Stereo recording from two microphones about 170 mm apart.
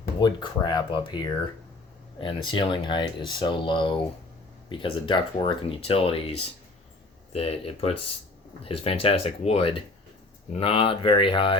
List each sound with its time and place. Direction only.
0.2 s speech: 25° left (ahead or behind)